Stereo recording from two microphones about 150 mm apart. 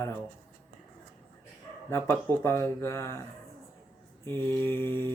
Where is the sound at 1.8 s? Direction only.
15° left (ahead or behind).